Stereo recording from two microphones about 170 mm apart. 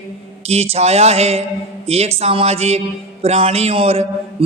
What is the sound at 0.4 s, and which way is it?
Speech, 35° right (ahead or behind).